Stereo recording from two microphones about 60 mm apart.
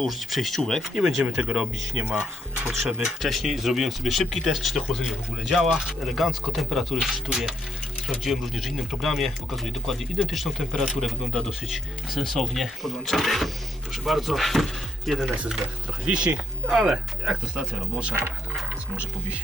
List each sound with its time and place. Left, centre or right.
0.0 s speech: centre
1.4 s speech: centre
2.7 s speech: centre
7.3 s speech: centre
8.2 s speech: centre
16.1 s speech: centre
18.1 s speech: right